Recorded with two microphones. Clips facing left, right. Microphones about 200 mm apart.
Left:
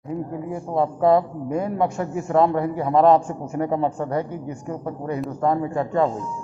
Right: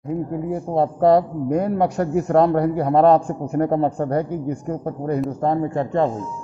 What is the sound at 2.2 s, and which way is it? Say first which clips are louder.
Speech: right 1 dB; 40° right (ahead or behind).